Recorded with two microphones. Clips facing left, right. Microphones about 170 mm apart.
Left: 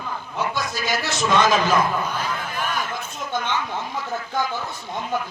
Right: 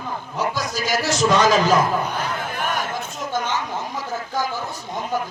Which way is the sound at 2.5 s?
50° right (ahead or behind).